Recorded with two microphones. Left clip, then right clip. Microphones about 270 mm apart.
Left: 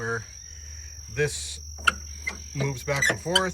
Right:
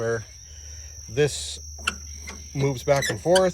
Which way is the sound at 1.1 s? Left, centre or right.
Centre.